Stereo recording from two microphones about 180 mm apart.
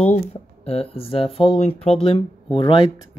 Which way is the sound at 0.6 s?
35° left (ahead or behind).